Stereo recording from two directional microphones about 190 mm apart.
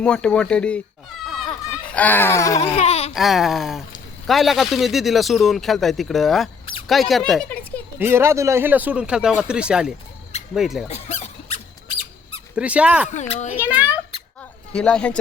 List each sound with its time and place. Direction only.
0.0 s speech: 5° left (ahead or behind)
1.8 s a sound: 5° left (ahead or behind)
2.6 s a sound: 35° left (ahead or behind)
3.2 s speech: centre (ahead or behind)
7.9 s speech: 10° right (ahead or behind)
10.8 s squeak: 35° left (ahead or behind)
12.5 s speech: 5° right (ahead or behind)
13.1 s a child's voice: 40° left (ahead or behind)
13.6 s speech: 5° right (ahead or behind)
14.7 s speech: 5° left (ahead or behind)